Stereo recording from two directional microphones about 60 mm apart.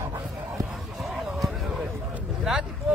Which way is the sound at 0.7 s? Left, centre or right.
Centre.